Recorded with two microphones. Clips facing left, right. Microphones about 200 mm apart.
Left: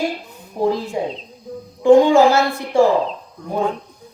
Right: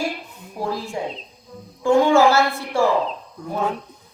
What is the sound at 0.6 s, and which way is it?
A woman's voice, 20° left (ahead or behind).